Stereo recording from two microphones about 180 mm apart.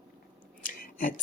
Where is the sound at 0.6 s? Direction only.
50° left (ahead or behind).